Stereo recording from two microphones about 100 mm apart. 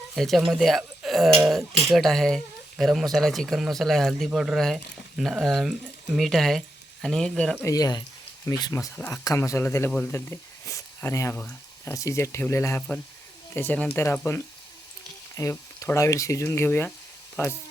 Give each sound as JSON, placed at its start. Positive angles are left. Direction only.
{"t": 0.2, "sound": "speech", "side_deg": 0}
{"t": 7.6, "sound": "speech", "side_deg": 40}
{"t": 9.0, "sound": "speech", "side_deg": 15}
{"t": 10.7, "sound": "a sound", "side_deg": 35}
{"t": 11.3, "sound": "speech", "side_deg": 15}
{"t": 11.9, "sound": "speech", "side_deg": 30}
{"t": 15.4, "sound": "a sound", "side_deg": 35}
{"t": 16.0, "sound": "speech", "side_deg": 30}